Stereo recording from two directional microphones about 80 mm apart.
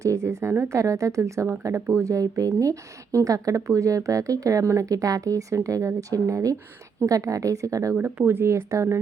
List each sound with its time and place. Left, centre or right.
0.0 s speech: right
7.9 s speech: right